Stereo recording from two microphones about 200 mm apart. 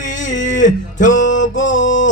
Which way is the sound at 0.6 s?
40° left (ahead or behind).